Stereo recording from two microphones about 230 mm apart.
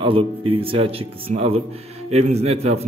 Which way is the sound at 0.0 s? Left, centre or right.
Right.